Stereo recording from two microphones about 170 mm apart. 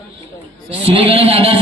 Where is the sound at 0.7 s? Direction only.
35° right (ahead or behind).